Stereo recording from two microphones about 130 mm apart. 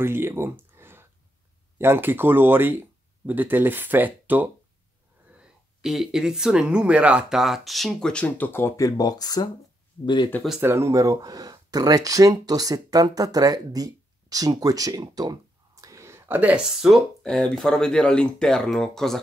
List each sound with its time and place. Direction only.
0.0 s speech: 20° right (ahead or behind)
5.4 s speech: 5° right (ahead or behind); by 10.3 s 35° left (ahead or behind)
10.6 s speech: 20° right (ahead or behind); by 19.1 s 5° left (ahead or behind)